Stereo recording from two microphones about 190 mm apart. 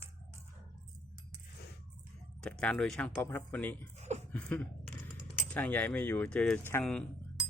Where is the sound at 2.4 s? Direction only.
5° left (ahead or behind).